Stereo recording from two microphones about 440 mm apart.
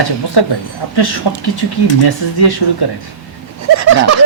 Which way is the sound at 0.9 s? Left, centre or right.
Left.